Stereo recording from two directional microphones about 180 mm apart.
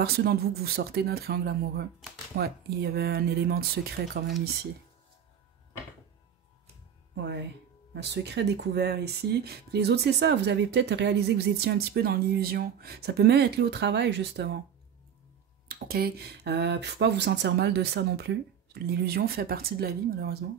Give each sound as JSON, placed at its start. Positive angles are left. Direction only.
{"t": 0.0, "sound": "speech", "side_deg": -60}
{"t": 7.2, "sound": "speech", "side_deg": -70}
{"t": 15.7, "sound": "speech", "side_deg": -60}